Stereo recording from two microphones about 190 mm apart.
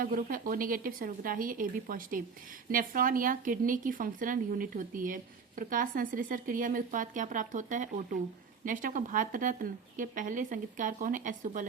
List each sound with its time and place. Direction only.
0.0 s a woman's voice: 50° right (ahead or behind)